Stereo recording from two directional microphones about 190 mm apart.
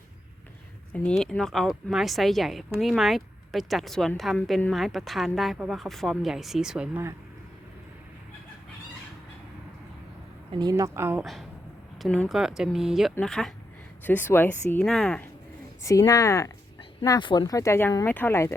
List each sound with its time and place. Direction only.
0.9 s speech: 5° left (ahead or behind)
10.5 s speech: 20° right (ahead or behind); by 15.3 s 5° left (ahead or behind)
15.8 s speech: 15° left (ahead or behind)